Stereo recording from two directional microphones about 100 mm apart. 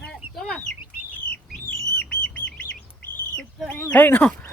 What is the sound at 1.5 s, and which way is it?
Bird, 10° left (ahead or behind).